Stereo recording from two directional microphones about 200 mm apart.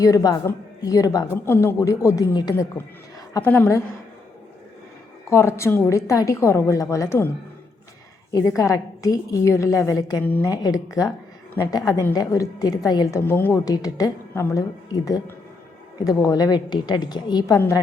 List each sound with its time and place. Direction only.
0.0 s speech: 20° left (ahead or behind)
5.3 s speech: 15° left (ahead or behind)
8.3 s speech: 15° left (ahead or behind)
16.0 s a woman's voice: 20° left (ahead or behind)